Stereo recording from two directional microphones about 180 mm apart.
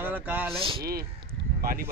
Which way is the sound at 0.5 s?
30° right (ahead or behind).